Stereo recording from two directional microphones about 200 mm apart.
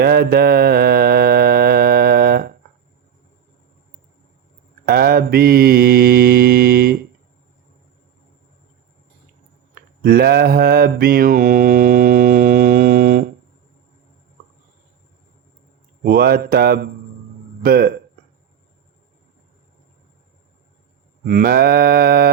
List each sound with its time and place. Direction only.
0.0 s mantra: 50° right (ahead or behind)
4.9 s mantra: 50° right (ahead or behind)
10.0 s mantra: 50° right (ahead or behind)
16.0 s mantra: 50° right (ahead or behind)
17.6 s speech: 50° right (ahead or behind)
21.2 s mantra: 50° right (ahead or behind)